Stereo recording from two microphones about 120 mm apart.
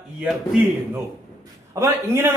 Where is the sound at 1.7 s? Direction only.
25° right (ahead or behind).